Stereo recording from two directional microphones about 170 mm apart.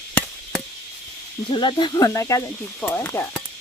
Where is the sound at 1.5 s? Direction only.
30° left (ahead or behind).